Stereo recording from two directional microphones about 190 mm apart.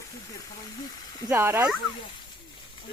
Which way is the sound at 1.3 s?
15° right (ahead or behind).